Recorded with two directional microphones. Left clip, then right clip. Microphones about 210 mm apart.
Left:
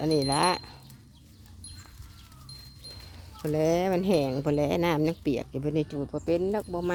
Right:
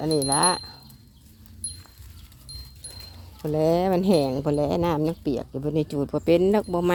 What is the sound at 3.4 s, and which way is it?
Speech, 10° right (ahead or behind).